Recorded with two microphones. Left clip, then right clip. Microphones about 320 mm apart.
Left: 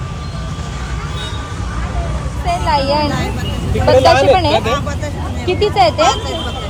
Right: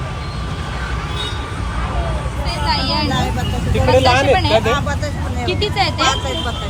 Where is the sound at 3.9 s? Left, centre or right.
Centre.